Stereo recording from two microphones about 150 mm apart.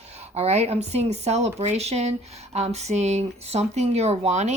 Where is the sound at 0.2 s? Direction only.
45° right (ahead or behind).